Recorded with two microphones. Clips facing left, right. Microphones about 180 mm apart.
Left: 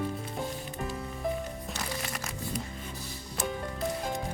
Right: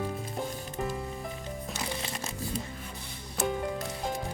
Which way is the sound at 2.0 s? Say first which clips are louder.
Right 1 dB; 25° right (ahead or behind).